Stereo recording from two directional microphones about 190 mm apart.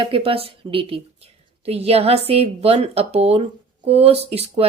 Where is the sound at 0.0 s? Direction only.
30° right (ahead or behind).